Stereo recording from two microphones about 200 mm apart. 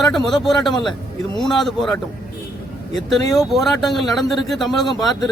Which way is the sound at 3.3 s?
Centre (ahead or behind).